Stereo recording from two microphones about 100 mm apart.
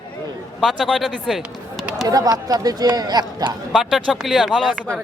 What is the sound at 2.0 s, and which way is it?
Speech, 40° right (ahead or behind).